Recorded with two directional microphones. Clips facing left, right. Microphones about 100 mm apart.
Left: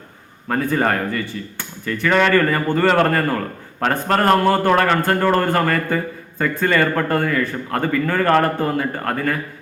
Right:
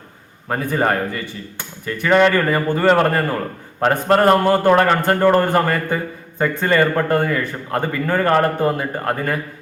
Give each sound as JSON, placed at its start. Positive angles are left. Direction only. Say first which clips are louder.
{"t": 0.4, "sound": "a man's voice", "louder": "even", "side_deg": -15}